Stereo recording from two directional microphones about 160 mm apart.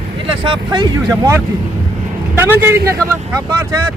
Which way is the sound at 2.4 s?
15° right (ahead or behind).